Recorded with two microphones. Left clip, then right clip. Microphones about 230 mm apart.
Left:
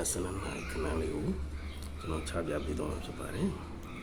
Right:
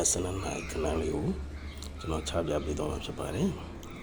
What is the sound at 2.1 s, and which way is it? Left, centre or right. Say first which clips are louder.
Speech: right 4 dB; centre.